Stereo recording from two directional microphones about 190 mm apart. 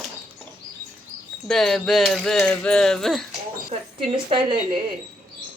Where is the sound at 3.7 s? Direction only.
35° right (ahead or behind).